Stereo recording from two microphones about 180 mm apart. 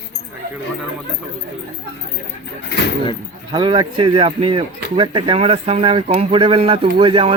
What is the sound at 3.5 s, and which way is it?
Speech, 25° right (ahead or behind).